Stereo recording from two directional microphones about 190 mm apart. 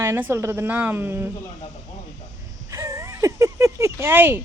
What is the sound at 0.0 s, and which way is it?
Speech, 15° right (ahead or behind).